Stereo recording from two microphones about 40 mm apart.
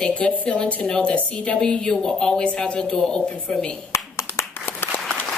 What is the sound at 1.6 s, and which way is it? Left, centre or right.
Speech, centre.